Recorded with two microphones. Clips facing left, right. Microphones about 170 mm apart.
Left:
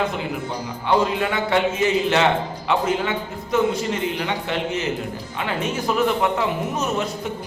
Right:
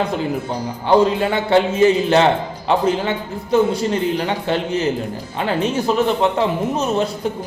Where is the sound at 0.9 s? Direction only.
30° right (ahead or behind).